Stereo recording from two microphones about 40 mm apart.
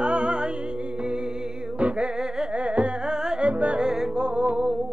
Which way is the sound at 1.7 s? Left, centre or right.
Right.